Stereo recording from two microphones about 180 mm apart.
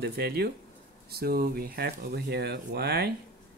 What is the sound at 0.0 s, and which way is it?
Speech, 65° right (ahead or behind).